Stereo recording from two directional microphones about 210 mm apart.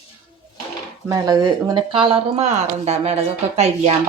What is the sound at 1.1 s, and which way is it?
Speech, 15° right (ahead or behind).